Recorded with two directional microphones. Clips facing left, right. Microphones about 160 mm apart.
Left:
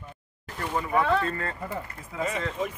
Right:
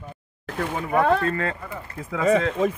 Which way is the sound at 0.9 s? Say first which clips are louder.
Right 5 dB; 50° right (ahead or behind).